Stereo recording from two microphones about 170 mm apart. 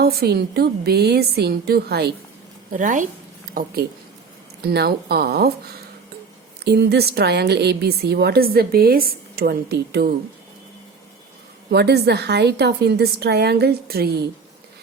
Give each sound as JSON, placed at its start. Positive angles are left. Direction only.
{"t": 0.0, "sound": "a woman's voice", "side_deg": -70}
{"t": 2.7, "sound": "speech", "side_deg": -50}
{"t": 4.6, "sound": "a woman's voice", "side_deg": -70}
{"t": 11.7, "sound": "a woman's voice", "side_deg": -75}